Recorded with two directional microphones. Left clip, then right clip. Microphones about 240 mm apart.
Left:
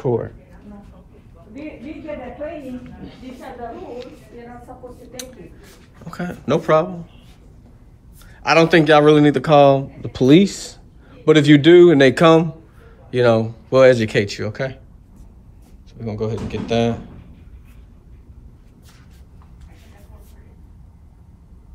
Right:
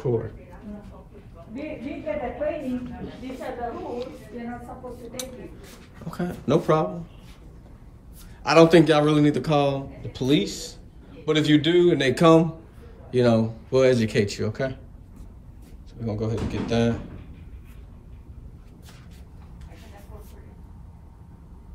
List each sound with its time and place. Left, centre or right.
3.7 s a sound: centre
5.2 s speech: centre
8.4 s speech: centre
15.9 s speech: centre